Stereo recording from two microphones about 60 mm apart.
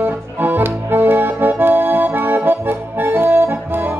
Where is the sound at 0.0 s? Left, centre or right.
Right.